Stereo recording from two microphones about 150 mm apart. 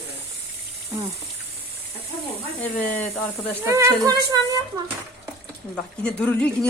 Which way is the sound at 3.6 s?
20° right (ahead or behind).